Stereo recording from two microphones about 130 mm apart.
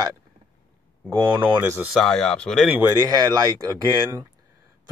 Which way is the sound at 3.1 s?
30° right (ahead or behind).